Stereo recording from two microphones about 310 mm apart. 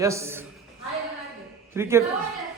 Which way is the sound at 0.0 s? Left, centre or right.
Centre.